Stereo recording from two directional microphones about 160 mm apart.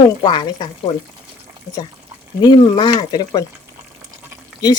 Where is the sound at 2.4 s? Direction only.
30° left (ahead or behind).